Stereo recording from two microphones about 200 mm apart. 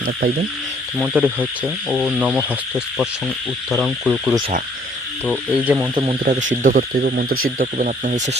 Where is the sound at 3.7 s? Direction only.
5° right (ahead or behind).